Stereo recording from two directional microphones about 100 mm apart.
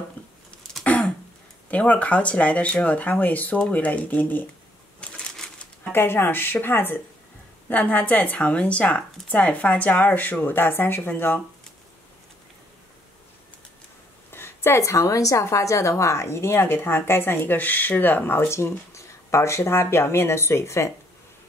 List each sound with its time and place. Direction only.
0.2 s a sound: 15° left (ahead or behind)
1.7 s a woman's voice: 15° left (ahead or behind)
5.0 s crumpling: 10° left (ahead or behind)
5.9 s a woman's voice: 25° left (ahead or behind)
14.3 s a woman's voice: 25° left (ahead or behind)